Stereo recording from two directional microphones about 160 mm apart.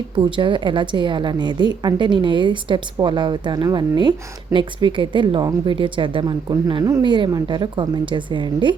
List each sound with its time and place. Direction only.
0.2 s a woman's voice: 30° right (ahead or behind)